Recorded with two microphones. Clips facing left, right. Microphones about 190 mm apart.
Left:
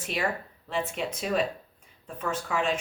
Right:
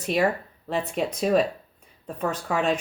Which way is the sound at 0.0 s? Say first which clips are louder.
Right 7 dB; 40° right (ahead or behind).